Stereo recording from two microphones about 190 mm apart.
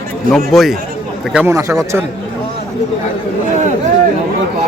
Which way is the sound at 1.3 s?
15° right (ahead or behind).